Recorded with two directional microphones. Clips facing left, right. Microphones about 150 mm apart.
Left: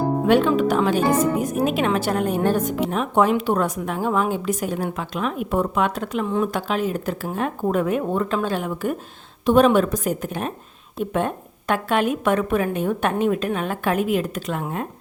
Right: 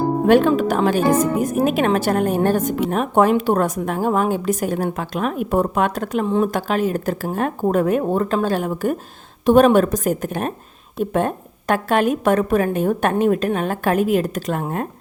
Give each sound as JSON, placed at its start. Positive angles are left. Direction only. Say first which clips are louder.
{"t": 0.3, "sound": "speech", "louder": "right 3 dB", "side_deg": -45}